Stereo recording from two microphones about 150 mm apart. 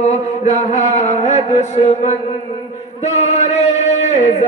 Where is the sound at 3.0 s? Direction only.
50° left (ahead or behind).